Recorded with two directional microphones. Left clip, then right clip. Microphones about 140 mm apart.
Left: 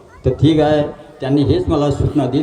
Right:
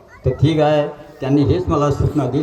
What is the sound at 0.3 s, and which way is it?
A man's voice, 20° left (ahead or behind).